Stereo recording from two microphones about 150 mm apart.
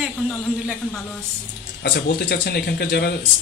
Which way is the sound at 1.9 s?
90° left.